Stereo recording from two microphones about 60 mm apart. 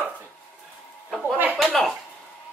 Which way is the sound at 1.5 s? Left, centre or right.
Centre.